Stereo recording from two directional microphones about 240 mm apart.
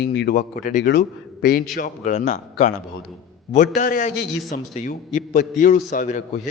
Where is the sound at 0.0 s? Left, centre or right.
Left.